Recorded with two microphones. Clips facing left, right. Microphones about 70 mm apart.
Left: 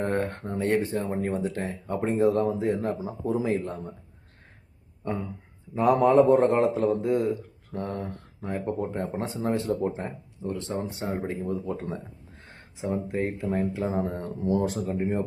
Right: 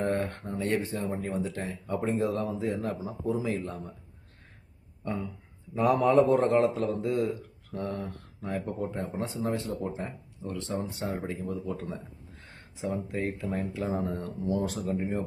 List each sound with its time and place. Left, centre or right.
0.0 s speech: left
6.1 s speech: left
11.3 s speech: left
12.9 s speech: left